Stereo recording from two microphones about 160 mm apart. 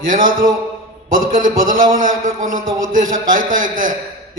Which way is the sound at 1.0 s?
60° right (ahead or behind).